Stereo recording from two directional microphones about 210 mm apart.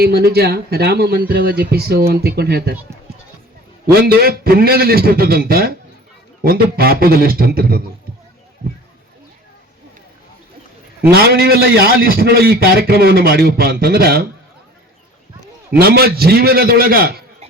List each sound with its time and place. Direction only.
0.0 s a man's voice: 50° right (ahead or behind)
3.9 s a man's voice: 45° right (ahead or behind)
11.1 s a man's voice: 50° right (ahead or behind)
15.7 s a man's voice: 50° right (ahead or behind)